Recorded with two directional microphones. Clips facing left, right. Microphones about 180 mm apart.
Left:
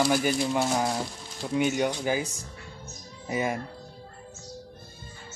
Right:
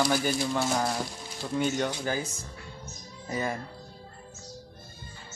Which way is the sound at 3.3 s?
15° left (ahead or behind).